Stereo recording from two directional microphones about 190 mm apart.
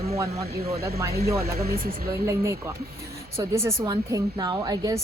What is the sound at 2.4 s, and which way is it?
A woman's voice, 15° right (ahead or behind).